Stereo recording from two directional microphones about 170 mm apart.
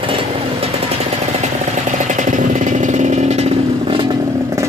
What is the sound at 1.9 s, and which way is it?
Vehicle, 45° right (ahead or behind).